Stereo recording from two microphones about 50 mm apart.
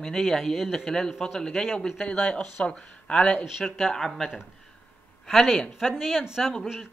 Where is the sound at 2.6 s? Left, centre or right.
Left.